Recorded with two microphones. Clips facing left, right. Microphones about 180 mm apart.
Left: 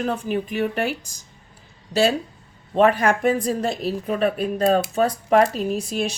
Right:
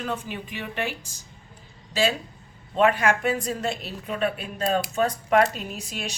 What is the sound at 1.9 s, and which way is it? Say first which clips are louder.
Speech: left 5 dB; 75° left (ahead or behind).